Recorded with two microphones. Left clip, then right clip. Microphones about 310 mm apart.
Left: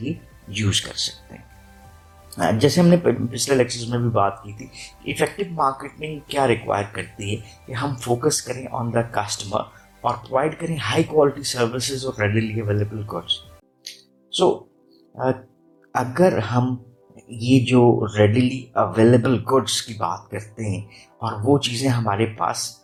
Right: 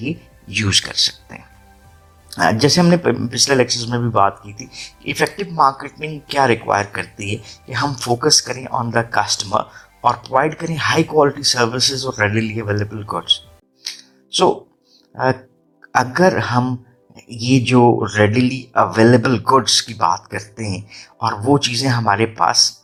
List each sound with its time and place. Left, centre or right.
0.5 s speech: right
13.8 s music: right
15.1 s speech: right